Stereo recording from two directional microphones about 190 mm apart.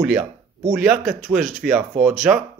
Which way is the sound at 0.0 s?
5° right (ahead or behind).